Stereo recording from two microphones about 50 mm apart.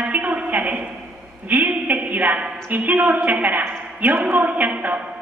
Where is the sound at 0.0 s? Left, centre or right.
Right.